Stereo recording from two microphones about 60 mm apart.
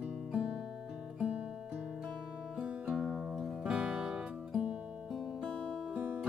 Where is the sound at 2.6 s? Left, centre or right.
Centre.